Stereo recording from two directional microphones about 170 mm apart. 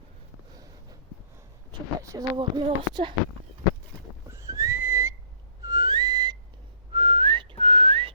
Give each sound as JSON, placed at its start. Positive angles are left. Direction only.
{"t": 0.5, "sound": "a sound", "side_deg": -20}
{"t": 2.0, "sound": "speech", "side_deg": -20}
{"t": 4.3, "sound": "whistling", "side_deg": -20}